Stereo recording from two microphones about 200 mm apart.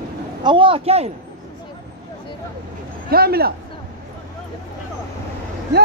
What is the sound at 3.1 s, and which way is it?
Speech, 50° right (ahead or behind).